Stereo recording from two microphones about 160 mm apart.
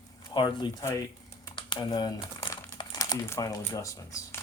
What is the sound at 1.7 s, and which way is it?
Crumpling, 25° left (ahead or behind).